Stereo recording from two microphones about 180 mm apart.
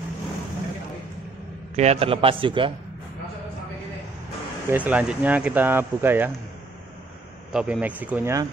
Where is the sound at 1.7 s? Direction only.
35° right (ahead or behind).